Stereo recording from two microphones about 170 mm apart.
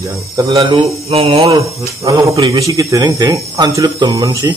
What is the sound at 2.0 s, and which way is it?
Speech, 20° right (ahead or behind).